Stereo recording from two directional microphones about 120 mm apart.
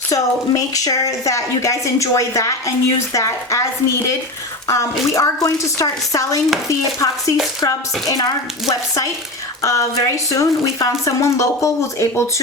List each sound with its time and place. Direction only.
0.1 s speech: 30° left (ahead or behind)
9.6 s a woman's voice: 25° left (ahead or behind)